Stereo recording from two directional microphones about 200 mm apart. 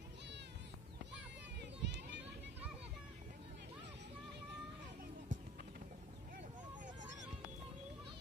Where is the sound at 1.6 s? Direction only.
60° right (ahead or behind).